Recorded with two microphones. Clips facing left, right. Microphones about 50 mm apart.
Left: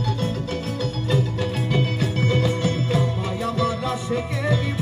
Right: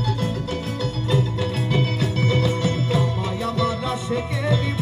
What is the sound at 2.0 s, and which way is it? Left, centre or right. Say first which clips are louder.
Music: even; left.